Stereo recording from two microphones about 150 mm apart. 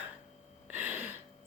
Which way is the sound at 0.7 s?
10° right (ahead or behind).